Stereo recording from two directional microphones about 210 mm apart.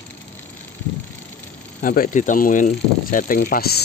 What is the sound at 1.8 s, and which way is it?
Speech, 40° left (ahead or behind).